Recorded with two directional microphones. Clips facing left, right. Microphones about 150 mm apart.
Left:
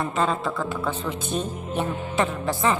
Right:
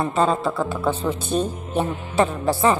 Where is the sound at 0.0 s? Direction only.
30° right (ahead or behind).